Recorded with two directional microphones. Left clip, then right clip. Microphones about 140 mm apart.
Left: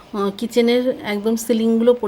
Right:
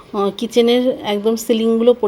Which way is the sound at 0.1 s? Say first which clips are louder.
Right 3 dB; 5° right (ahead or behind).